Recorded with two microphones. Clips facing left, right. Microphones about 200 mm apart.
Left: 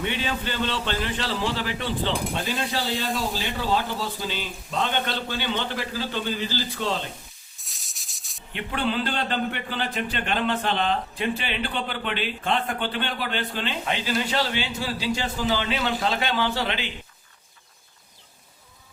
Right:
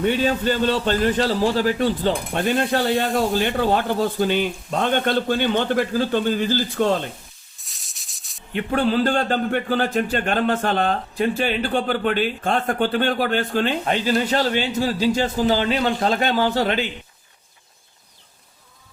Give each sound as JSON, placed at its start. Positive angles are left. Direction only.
{"t": 0.0, "sound": "a man's voice", "side_deg": -40}
{"t": 2.3, "sound": "cutlery", "side_deg": -55}
{"t": 3.1, "sound": "a man's voice", "side_deg": -50}
{"t": 7.6, "sound": "rub", "side_deg": 0}
{"t": 8.5, "sound": "a man's voice", "side_deg": -45}